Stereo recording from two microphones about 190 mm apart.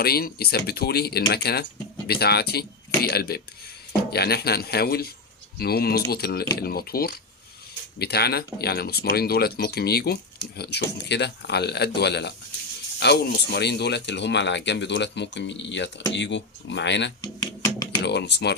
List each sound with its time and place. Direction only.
0.0 s speech: 55° left (ahead or behind)
17.2 s music: 20° left (ahead or behind)
18.0 s speech: 60° left (ahead or behind)